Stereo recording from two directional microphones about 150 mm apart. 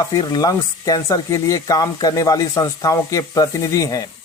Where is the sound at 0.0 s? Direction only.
25° left (ahead or behind).